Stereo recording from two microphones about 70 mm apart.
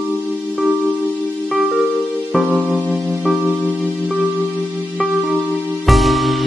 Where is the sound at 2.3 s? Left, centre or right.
Centre.